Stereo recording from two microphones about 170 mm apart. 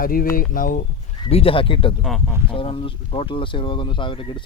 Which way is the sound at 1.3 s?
35° left (ahead or behind).